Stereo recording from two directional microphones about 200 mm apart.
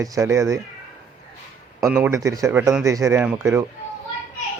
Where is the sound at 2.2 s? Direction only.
15° right (ahead or behind).